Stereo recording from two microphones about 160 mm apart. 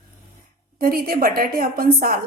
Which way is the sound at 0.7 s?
65° right (ahead or behind).